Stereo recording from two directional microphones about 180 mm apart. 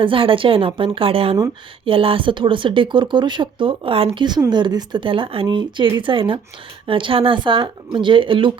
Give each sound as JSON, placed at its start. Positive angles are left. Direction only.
{"t": 0.0, "sound": "speech", "side_deg": -30}